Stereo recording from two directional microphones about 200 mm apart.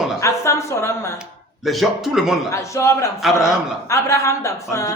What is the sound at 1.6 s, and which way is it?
Speech, centre (ahead or behind).